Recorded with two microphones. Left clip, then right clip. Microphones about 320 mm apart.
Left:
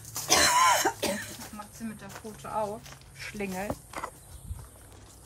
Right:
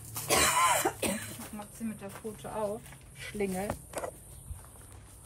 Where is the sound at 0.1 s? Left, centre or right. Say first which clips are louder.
Left 4 dB; centre.